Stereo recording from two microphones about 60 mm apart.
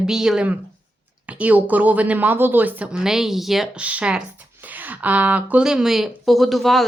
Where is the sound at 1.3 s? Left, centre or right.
Right.